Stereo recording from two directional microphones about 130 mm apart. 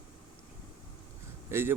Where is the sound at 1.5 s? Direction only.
20° right (ahead or behind).